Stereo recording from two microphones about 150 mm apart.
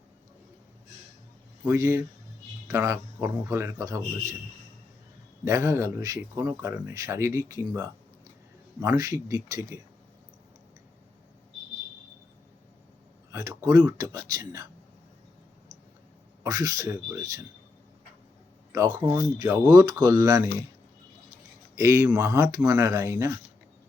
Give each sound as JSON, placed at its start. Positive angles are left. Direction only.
{"t": 1.6, "sound": "speech", "side_deg": -20}
{"t": 5.5, "sound": "speech", "side_deg": -20}
{"t": 13.3, "sound": "speech", "side_deg": -20}
{"t": 16.4, "sound": "speech", "side_deg": -25}
{"t": 18.9, "sound": "speech", "side_deg": -15}
{"t": 21.8, "sound": "speech", "side_deg": -20}